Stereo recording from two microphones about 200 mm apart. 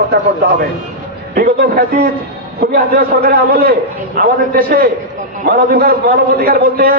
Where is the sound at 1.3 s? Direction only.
45° right (ahead or behind).